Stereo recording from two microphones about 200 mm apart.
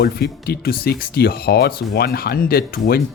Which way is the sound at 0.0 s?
50° left (ahead or behind).